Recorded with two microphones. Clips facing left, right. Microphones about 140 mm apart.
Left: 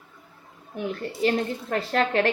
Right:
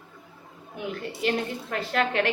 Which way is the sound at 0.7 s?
35° left (ahead or behind).